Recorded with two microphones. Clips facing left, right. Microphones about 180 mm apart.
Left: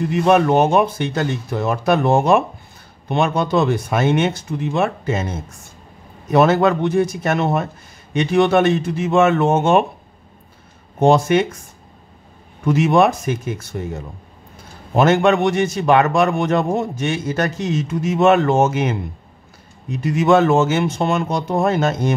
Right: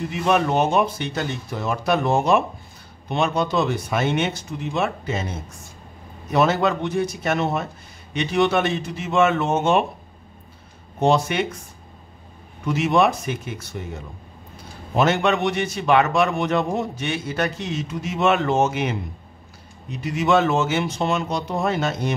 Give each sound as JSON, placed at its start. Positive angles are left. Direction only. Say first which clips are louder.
{"t": 0.1, "sound": "a man's voice", "louder": "left 6 dB", "side_deg": 55}
{"t": 6.3, "sound": "a man's voice", "louder": "left 5 dB", "side_deg": 55}
{"t": 11.0, "sound": "a man's voice", "louder": "left 5 dB", "side_deg": 50}
{"t": 12.6, "sound": "a man's voice", "louder": "left 4 dB", "side_deg": 50}
{"t": 15.0, "sound": "a man's voice", "louder": "left 5 dB", "side_deg": 50}